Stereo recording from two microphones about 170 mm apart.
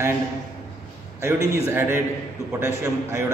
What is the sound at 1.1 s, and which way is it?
A man's voice, 15° right (ahead or behind).